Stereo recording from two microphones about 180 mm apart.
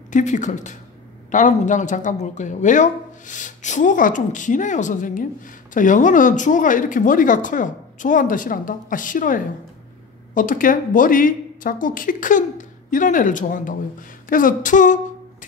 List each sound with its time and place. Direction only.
0.1 s speech: 45° left (ahead or behind)